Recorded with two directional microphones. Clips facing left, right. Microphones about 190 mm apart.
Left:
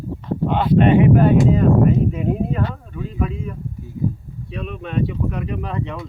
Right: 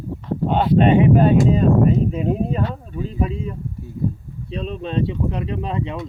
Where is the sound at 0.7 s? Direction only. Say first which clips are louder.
Left 1 dB; 20° right (ahead or behind).